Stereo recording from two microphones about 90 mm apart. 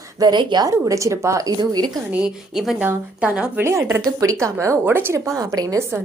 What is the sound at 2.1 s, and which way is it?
Speech, 5° right (ahead or behind).